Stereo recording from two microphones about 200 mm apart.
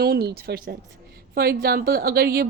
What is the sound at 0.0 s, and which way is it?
A woman's voice, 50° right (ahead or behind).